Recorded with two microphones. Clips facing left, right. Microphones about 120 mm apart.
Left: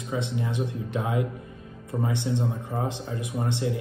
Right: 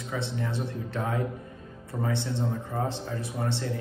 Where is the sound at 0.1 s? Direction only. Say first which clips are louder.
Left 3 dB; 15° left (ahead or behind).